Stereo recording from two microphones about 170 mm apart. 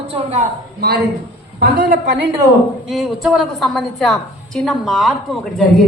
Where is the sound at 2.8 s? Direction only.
Centre (ahead or behind).